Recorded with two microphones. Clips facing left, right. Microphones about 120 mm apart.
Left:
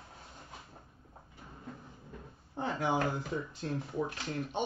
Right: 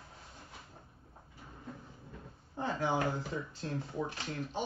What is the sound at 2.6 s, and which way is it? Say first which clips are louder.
Speech: even; 20° left (ahead or behind).